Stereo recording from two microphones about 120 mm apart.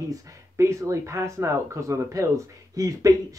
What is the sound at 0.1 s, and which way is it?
Speech, 25° right (ahead or behind).